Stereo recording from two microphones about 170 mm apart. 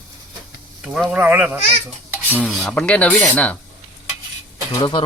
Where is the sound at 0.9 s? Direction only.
10° right (ahead or behind).